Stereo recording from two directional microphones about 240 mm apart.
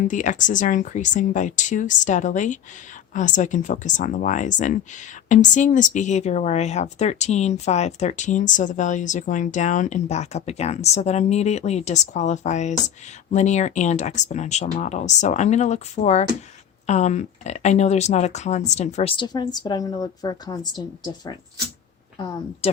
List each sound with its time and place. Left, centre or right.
0.0 s speech: left